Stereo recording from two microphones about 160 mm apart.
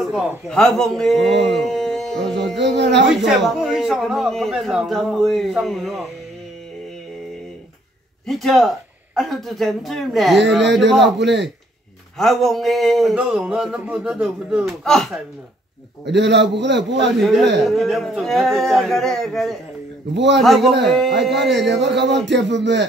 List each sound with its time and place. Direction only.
0.0 s a sound: centre (ahead or behind)
0.5 s a man's voice: 5° left (ahead or behind)
2.5 s a man's voice: 90° right
2.9 s a man's voice: centre (ahead or behind)
8.3 s a man's voice: centre (ahead or behind)
11.1 s a man's voice: 90° right
12.2 s a man's voice: centre (ahead or behind)
16.1 s a man's voice: 90° right
17.2 s a man's voice: centre (ahead or behind)
21.3 s a man's voice: 90° right